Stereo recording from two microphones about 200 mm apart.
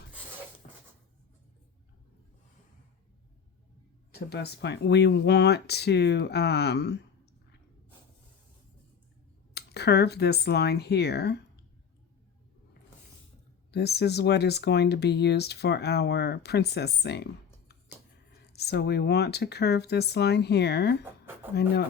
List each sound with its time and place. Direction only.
0.6 s cupboard open or close: 40° left (ahead or behind)
4.1 s speech: 55° left (ahead or behind)
9.6 s speech: 55° left (ahead or behind)
13.7 s speech: 55° left (ahead or behind)
18.5 s speech: 55° left (ahead or behind)
21.0 s a sound: 10° right (ahead or behind)